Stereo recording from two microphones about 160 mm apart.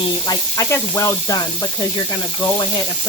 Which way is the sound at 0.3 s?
20° left (ahead or behind).